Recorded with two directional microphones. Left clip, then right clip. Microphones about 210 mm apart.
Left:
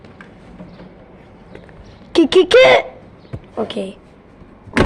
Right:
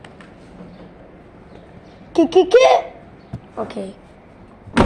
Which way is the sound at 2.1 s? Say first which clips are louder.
Left 2 dB; 35° left (ahead or behind).